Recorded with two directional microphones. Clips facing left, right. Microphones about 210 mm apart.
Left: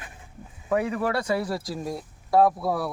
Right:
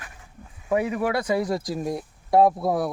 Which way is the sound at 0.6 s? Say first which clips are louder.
Right 1 dB; 10° right (ahead or behind).